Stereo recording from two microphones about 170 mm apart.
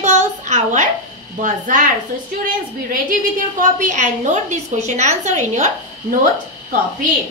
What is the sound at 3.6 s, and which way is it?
A woman's voice, 45° right (ahead or behind).